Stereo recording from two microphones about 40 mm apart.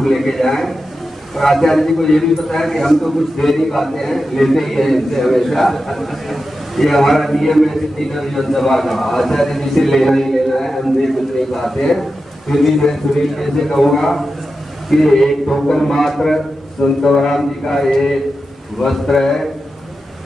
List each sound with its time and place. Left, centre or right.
0.0 s a man's voice: centre